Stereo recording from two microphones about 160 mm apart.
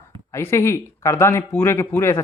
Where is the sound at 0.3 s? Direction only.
20° left (ahead or behind).